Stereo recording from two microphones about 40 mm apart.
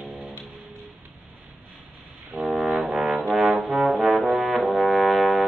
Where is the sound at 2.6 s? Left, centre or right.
Centre.